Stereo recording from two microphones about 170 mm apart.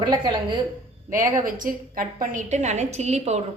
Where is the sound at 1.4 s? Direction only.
55° right (ahead or behind).